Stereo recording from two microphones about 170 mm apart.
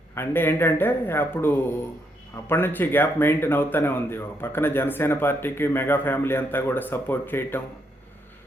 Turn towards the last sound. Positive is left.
turn(degrees=15)  # may be behind; listen again after turning